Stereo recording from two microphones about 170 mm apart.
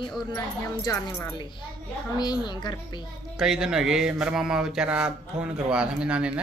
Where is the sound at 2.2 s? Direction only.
25° left (ahead or behind).